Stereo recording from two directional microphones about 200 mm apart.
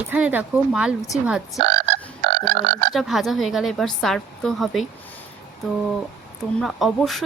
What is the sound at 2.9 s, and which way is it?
A woman's voice, centre (ahead or behind).